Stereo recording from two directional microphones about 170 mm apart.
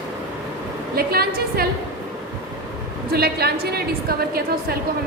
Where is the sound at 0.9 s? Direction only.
65° right (ahead or behind).